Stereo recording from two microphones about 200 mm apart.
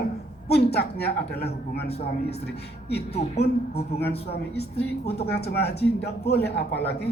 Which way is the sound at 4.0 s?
55° left (ahead or behind).